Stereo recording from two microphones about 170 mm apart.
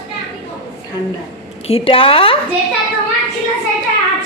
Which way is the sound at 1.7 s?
30° left (ahead or behind).